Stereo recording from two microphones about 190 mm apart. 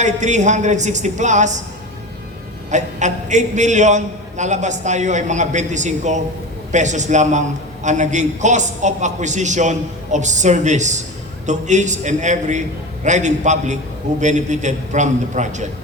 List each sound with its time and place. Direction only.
0.0 s a man's voice: 40° right (ahead or behind)
2.6 s a man's voice: 40° right (ahead or behind)